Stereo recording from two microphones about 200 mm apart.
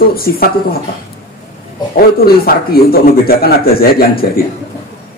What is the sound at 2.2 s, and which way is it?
A man's voice, 50° left (ahead or behind).